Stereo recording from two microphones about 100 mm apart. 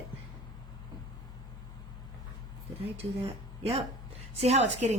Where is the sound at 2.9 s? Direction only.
80° right.